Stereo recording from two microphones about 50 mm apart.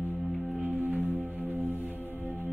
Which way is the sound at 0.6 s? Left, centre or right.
Right.